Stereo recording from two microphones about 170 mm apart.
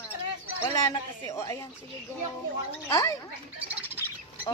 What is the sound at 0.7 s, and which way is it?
Speech, 20° left (ahead or behind).